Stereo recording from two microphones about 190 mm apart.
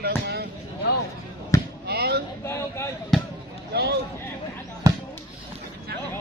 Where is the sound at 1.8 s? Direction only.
60° right (ahead or behind).